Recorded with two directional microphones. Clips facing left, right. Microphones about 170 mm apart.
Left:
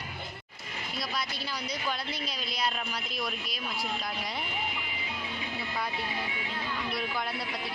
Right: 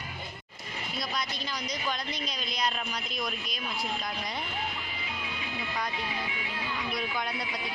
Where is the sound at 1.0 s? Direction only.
5° left (ahead or behind).